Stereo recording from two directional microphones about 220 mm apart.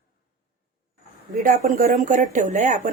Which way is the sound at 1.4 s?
35° right (ahead or behind).